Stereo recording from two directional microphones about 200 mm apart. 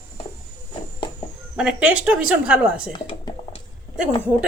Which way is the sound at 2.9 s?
20° left (ahead or behind).